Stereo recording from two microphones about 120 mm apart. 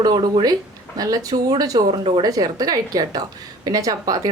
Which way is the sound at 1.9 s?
50° right (ahead or behind).